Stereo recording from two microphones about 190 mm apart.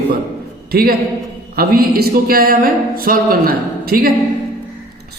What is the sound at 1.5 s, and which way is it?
Speech, 55° right (ahead or behind).